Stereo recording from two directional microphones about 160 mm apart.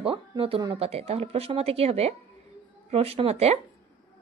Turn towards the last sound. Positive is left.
turn(degrees=-40)  # may be behind; listen again after turning